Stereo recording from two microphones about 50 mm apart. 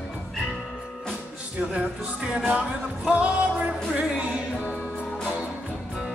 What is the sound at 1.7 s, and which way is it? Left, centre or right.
Music, centre.